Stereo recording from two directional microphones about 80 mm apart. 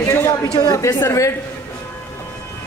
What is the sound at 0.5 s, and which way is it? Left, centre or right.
Speech, left.